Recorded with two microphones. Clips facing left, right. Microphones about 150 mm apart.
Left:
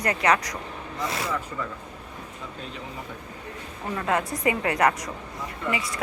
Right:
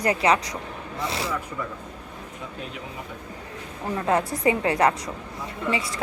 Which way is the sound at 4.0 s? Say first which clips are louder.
Right 3 dB; 30° right (ahead or behind).